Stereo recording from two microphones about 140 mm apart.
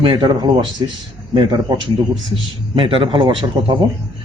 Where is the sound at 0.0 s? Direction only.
35° right (ahead or behind).